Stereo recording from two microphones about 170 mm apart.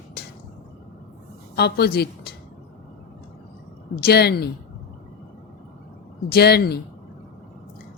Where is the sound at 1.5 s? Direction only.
70° left (ahead or behind).